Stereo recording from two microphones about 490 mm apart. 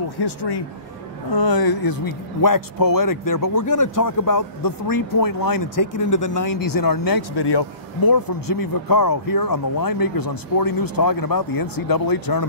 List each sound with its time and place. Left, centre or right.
0.2 s speech: left